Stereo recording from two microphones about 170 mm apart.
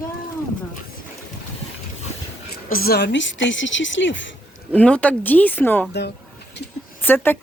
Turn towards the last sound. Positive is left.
turn(degrees=10)  # may be behind; listen again after turning